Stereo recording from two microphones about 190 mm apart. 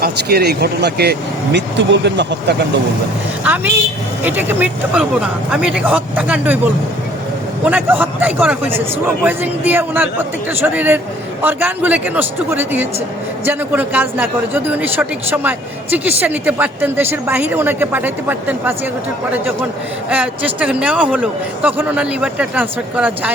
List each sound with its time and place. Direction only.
0.0 s speech: 55° right (ahead or behind)
3.4 s speech: 10° right (ahead or behind)
7.6 s speech: 5° right (ahead or behind)
20.1 s speech: 5° right (ahead or behind)